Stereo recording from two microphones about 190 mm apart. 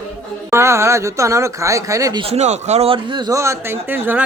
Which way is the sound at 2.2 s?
35° right (ahead or behind).